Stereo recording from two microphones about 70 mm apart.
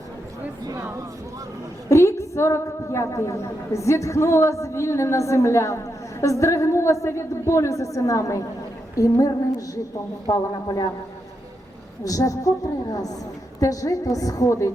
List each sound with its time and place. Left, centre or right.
1.9 s a woman's voice: left
12.0 s a woman's voice: left